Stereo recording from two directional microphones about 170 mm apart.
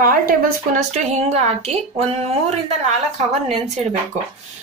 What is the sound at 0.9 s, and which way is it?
A woman's voice, 40° right (ahead or behind).